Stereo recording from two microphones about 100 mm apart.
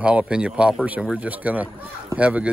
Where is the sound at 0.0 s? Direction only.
10° right (ahead or behind).